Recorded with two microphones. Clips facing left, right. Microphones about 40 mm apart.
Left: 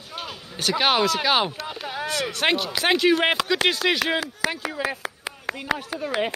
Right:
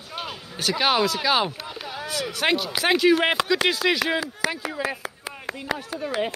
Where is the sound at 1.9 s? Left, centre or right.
Left.